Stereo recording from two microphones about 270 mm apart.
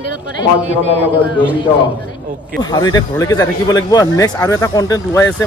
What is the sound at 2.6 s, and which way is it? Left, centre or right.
Speech, centre.